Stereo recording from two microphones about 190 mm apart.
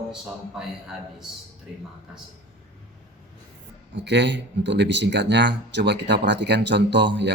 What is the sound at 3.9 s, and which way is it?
Speech, 65° right (ahead or behind).